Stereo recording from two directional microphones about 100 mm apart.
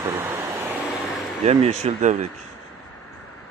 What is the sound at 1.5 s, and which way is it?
Speech, 90° right.